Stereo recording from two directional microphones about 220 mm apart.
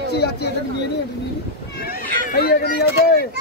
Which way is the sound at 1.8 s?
45° left (ahead or behind).